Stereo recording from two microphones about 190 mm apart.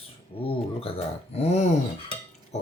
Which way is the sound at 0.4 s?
30° left (ahead or behind).